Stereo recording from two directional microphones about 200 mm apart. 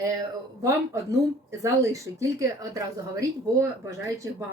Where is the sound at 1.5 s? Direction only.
15° right (ahead or behind).